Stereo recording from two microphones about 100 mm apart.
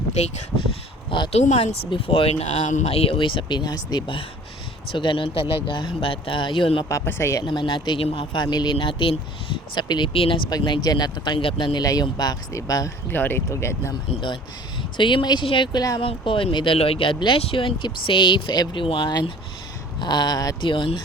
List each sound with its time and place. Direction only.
1.3 s speech: 90° left
1.9 s speech: 65° left (ahead or behind); by 3.2 s 90° left
3.2 s speech: 55° left (ahead or behind)
4.9 s speech: 60° left (ahead or behind)
7.0 s speech: 25° left (ahead or behind)
7.4 s speech: 50° left (ahead or behind)
10.6 s speech: 45° left (ahead or behind)
11.8 s speech: 40° left (ahead or behind)
13.1 s speech: 20° left (ahead or behind)
14.9 s speech: 50° left (ahead or behind)
16.7 s speech: 75° left (ahead or behind); by 19.1 s 55° left (ahead or behind)
20.0 s speech: 45° left (ahead or behind)
20.6 s speech: 55° left (ahead or behind)